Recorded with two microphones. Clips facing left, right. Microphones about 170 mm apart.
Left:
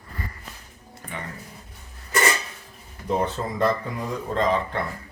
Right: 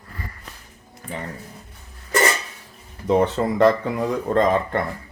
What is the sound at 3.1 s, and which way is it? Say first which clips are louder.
Speech: right 6 dB; 70° right (ahead or behind).